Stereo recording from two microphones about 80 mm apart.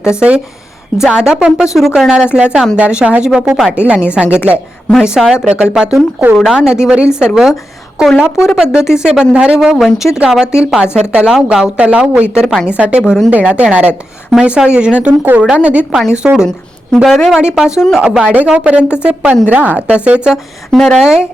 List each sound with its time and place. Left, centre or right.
0.2 s a woman's voice: centre
10.0 s a woman's voice: centre
10.5 s a woman's voice: centre
20.3 s speech: centre
21.0 s a woman's voice: centre